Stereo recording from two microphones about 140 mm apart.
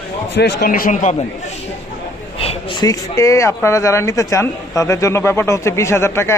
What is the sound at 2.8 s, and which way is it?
Speech, 25° left (ahead or behind).